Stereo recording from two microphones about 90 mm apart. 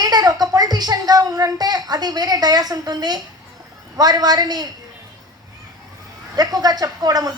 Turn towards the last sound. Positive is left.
turn(degrees=-45)  # may be behind; listen again after turning